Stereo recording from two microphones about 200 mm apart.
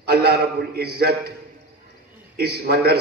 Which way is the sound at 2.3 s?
50° right (ahead or behind).